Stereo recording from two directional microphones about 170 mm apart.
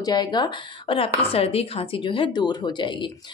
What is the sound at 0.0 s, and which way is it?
Speech, 25° left (ahead or behind).